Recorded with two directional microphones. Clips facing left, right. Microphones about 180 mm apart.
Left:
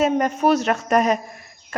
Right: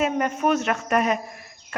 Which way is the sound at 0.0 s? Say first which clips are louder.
Left 4 dB; 35° left (ahead or behind).